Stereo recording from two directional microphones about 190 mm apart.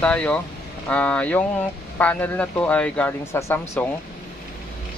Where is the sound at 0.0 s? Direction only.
5° left (ahead or behind).